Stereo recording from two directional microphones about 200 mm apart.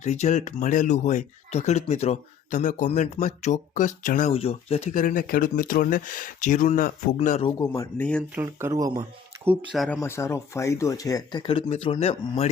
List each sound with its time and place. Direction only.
0.0 s speech: 35° left (ahead or behind)
7.2 s speech: 30° left (ahead or behind)
7.6 s speech: 15° left (ahead or behind)
8.4 s speech: 10° right (ahead or behind)
9.7 s speech: centre (ahead or behind)
10.0 s speech: 15° left (ahead or behind); by 12.5 s 30° left (ahead or behind)